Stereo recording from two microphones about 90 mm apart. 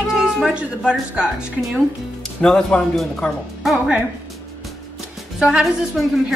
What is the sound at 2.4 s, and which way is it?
A woman's voice, 5° left (ahead or behind).